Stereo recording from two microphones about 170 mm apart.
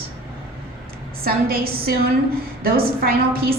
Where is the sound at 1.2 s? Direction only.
60° right (ahead or behind).